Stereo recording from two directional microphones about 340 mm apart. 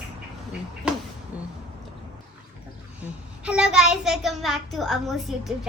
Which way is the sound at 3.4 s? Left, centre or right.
Centre.